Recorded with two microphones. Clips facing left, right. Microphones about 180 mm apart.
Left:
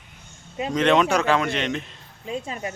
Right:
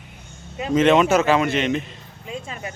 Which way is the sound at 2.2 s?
30° left (ahead or behind).